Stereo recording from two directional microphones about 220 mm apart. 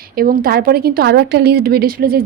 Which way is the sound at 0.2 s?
40° right (ahead or behind).